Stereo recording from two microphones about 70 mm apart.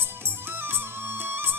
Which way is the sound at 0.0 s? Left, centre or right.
Right.